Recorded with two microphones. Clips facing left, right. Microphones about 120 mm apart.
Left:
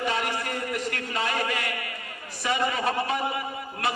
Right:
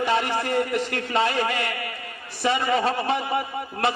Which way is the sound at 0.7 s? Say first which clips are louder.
Right 5 dB; 25° right (ahead or behind).